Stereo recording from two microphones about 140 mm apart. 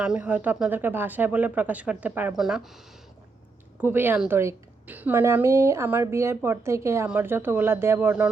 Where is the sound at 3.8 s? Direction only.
15° right (ahead or behind).